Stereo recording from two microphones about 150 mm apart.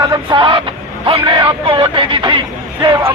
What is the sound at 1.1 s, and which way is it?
Speech, 35° right (ahead or behind).